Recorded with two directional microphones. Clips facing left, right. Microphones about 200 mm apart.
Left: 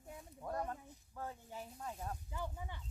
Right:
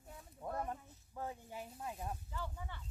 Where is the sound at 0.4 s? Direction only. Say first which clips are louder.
Even; 15° right (ahead or behind).